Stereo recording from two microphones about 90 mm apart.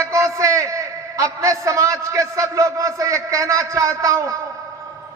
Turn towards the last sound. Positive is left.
turn(degrees=-40)  # may be behind; listen again after turning